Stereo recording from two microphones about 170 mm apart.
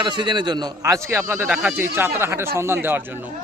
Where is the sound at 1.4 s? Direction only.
Centre (ahead or behind).